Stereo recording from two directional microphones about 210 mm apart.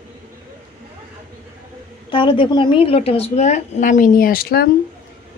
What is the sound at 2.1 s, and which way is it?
Speech, 25° left (ahead or behind).